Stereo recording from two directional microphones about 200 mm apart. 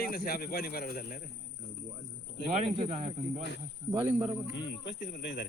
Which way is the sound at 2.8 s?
35° right (ahead or behind).